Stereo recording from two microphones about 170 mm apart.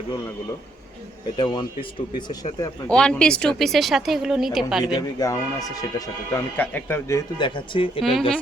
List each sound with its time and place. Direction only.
1.4 s speech: 25° left (ahead or behind)
2.8 s speech: 5° left (ahead or behind)
4.9 s speech: 20° left (ahead or behind)